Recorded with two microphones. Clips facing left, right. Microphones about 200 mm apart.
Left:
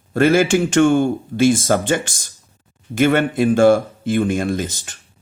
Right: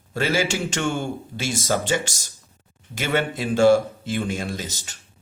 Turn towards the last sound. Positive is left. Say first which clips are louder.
# left 9 dB
turn(degrees=55)  # may be behind; listen again after turning